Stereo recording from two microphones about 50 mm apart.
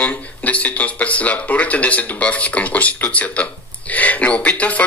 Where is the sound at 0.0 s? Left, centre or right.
Left.